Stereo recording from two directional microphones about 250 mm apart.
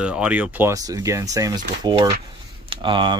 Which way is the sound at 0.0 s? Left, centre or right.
Centre.